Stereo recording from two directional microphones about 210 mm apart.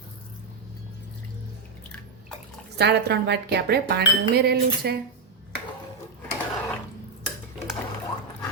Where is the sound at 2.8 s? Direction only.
55° right (ahead or behind).